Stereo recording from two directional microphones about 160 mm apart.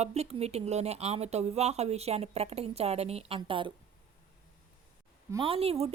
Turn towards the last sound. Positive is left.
turn(degrees=-40)  # may be behind; listen again after turning